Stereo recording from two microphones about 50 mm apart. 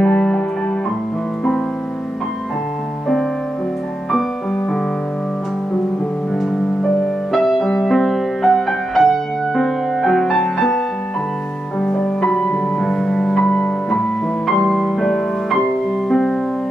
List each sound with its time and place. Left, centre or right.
0.0 s music: centre
7.3 s music: centre
11.8 s music: centre
14.4 s music: centre